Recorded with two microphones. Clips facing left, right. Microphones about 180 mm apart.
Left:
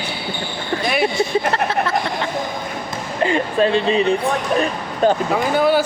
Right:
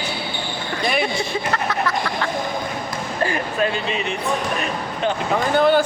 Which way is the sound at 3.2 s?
25° left (ahead or behind).